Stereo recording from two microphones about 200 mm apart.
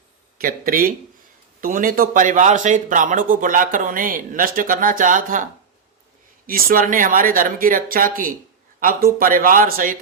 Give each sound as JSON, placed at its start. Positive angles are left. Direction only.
{"t": 0.3, "sound": "speech", "side_deg": -45}
{"t": 6.5, "sound": "speech", "side_deg": -45}